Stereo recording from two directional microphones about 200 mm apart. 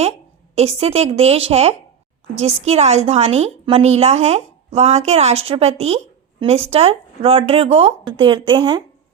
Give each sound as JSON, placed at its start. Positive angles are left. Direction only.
{"t": 0.5, "sound": "speech", "side_deg": -30}